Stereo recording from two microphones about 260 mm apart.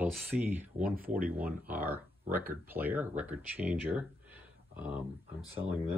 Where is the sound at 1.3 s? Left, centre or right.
Centre.